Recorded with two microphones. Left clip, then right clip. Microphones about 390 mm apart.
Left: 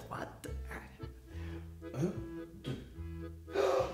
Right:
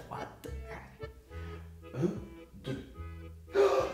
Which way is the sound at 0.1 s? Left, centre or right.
Centre.